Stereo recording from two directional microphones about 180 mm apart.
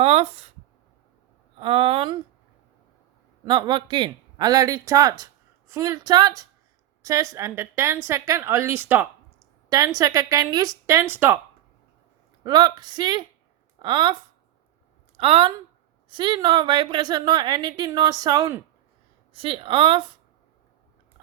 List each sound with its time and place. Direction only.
0.0 s a sound: 35° right (ahead or behind)
1.5 s speech: 30° right (ahead or behind)
3.4 s a man's voice: 25° right (ahead or behind)
12.4 s a woman's voice: 25° right (ahead or behind)
15.2 s a woman's voice: 30° right (ahead or behind)